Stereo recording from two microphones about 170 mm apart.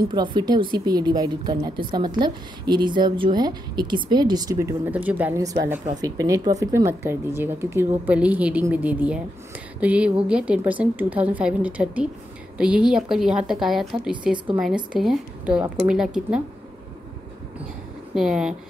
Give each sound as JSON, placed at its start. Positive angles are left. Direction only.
{"t": 0.1, "sound": "speech", "side_deg": -25}
{"t": 4.9, "sound": "a woman's voice", "side_deg": -10}
{"t": 18.1, "sound": "a woman's voice", "side_deg": -5}